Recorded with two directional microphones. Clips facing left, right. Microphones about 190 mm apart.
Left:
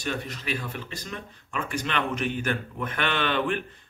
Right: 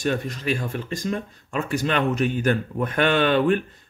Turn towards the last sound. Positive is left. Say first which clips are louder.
# right 7 dB
turn(degrees=-40)  # may be behind; listen again after turning